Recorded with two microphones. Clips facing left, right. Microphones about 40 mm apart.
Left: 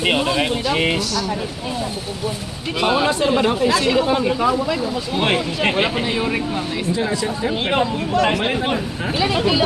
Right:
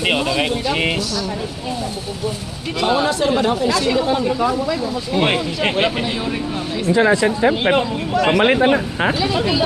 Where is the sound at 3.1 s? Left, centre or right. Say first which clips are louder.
Even; centre.